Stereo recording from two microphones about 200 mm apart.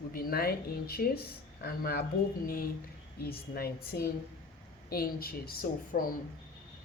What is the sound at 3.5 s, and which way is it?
Speech, 50° left (ahead or behind).